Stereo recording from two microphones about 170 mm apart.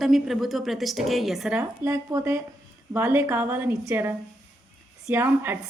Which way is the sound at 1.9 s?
15° right (ahead or behind).